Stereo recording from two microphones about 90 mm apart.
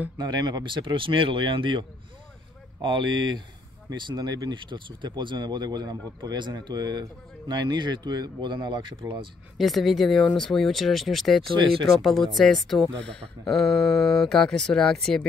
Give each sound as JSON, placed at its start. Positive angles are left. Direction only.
{"t": 0.2, "sound": "speech", "side_deg": -50}
{"t": 9.6, "sound": "speech", "side_deg": 0}
{"t": 11.5, "sound": "speech", "side_deg": -75}
{"t": 12.0, "sound": "speech", "side_deg": 0}